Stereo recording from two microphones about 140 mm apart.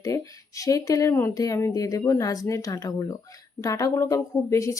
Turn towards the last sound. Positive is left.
turn(degrees=20)  # may be behind; listen again after turning